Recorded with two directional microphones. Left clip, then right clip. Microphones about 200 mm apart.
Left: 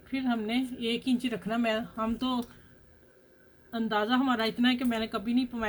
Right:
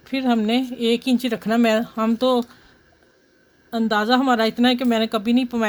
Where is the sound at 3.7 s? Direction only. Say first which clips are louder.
Right 9 dB; 65° right (ahead or behind).